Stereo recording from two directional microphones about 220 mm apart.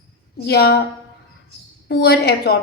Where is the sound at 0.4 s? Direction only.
45° left (ahead or behind).